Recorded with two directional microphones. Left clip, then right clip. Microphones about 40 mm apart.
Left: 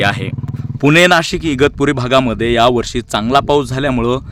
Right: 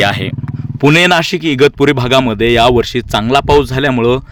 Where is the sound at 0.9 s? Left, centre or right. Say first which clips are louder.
Left 1 dB; right.